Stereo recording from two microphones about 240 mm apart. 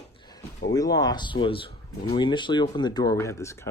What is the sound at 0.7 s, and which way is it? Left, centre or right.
Speech, centre.